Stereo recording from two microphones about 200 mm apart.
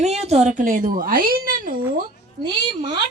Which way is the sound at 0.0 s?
35° right (ahead or behind).